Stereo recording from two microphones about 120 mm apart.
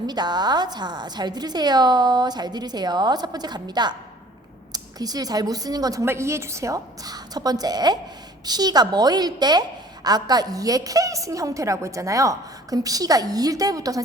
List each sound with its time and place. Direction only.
0.1 s a woman's voice: 35° right (ahead or behind)